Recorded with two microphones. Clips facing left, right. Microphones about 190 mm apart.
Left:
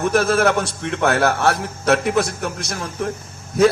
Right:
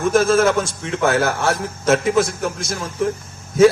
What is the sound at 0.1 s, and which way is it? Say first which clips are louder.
A man's voice: right 3 dB; 65° left (ahead or behind).